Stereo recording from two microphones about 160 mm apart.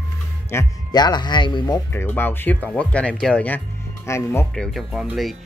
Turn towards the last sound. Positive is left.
turn(degrees=0)  # may be behind; listen again after turning